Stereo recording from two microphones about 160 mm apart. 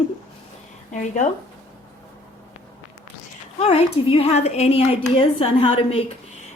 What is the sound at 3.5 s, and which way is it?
A woman's voice, 40° left (ahead or behind).